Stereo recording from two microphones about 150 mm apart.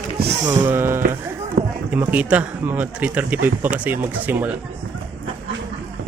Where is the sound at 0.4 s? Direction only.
25° right (ahead or behind).